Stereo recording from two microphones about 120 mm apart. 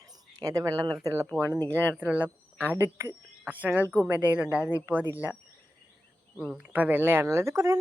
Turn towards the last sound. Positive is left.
turn(degrees=-25)  # may be behind; listen again after turning